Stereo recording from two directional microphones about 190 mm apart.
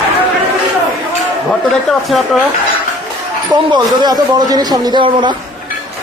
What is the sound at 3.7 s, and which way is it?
A man's voice, 20° right (ahead or behind).